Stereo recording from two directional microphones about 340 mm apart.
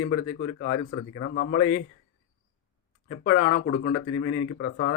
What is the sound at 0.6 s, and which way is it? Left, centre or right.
Speech, left.